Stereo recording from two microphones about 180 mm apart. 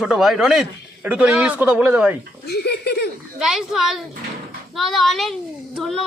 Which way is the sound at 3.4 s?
Centre (ahead or behind).